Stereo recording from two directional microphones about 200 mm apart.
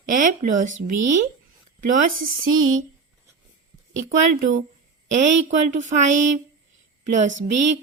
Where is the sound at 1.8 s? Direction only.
40° right (ahead or behind).